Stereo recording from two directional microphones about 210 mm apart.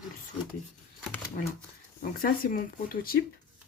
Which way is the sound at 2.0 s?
45° left (ahead or behind).